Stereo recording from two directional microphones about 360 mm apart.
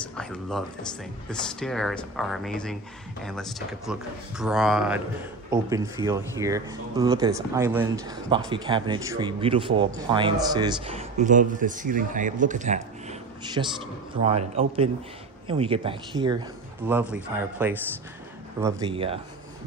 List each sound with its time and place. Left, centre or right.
0.2 s a man's voice: centre